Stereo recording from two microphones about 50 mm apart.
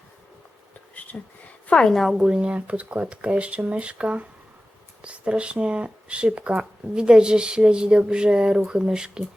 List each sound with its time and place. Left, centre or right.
0.9 s a sound: left
1.6 s a woman's voice: left
1.9 s a woman's voice: centre
2.2 s speech: centre